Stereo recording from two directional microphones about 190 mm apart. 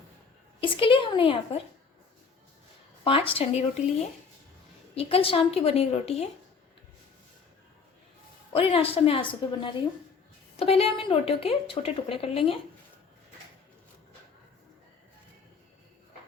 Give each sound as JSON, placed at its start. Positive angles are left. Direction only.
{"t": 0.6, "sound": "a sound", "side_deg": 25}
{"t": 3.0, "sound": "a woman's voice", "side_deg": 30}
{"t": 4.9, "sound": "a woman's voice", "side_deg": 30}
{"t": 8.5, "sound": "a woman's voice", "side_deg": 30}